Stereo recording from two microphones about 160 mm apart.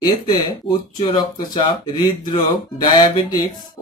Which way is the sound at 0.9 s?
30° left (ahead or behind).